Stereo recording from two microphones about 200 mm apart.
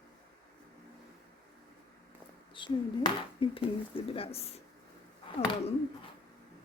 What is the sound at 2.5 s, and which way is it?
Speech, 25° left (ahead or behind).